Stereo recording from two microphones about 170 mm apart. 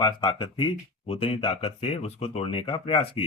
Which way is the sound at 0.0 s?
25° left (ahead or behind).